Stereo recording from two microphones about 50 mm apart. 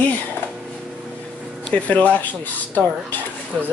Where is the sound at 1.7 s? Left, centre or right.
Left.